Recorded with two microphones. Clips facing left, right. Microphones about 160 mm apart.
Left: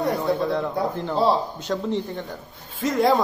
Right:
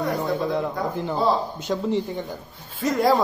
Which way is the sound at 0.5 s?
5° right (ahead or behind).